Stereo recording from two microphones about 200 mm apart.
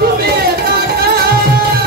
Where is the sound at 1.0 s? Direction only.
50° right (ahead or behind).